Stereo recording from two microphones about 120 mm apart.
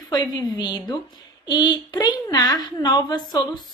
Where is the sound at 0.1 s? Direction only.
35° left (ahead or behind).